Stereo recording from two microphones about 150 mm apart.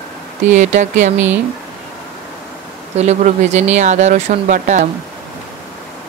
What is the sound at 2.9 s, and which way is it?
Speech, 45° right (ahead or behind).